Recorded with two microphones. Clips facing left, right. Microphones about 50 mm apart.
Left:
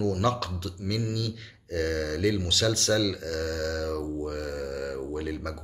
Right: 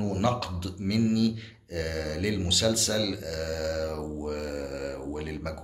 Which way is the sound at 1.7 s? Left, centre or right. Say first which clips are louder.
Left 3 dB; centre.